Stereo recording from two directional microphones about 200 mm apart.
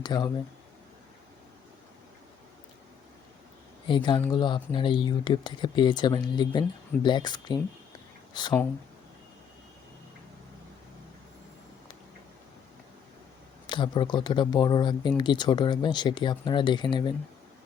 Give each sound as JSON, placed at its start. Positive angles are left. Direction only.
{"t": 0.0, "sound": "speech", "side_deg": 20}
{"t": 3.8, "sound": "speech", "side_deg": 25}
{"t": 13.7, "sound": "speech", "side_deg": 25}